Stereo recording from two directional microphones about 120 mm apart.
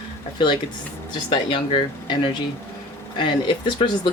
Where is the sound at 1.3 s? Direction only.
40° left (ahead or behind).